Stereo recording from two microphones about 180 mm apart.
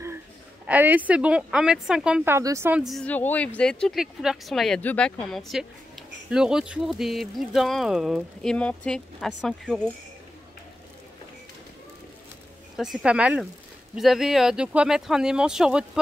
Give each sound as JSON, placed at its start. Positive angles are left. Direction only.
{"t": 0.7, "sound": "a woman's voice", "side_deg": -10}
{"t": 2.8, "sound": "speech", "side_deg": 0}
{"t": 12.7, "sound": "speech", "side_deg": -5}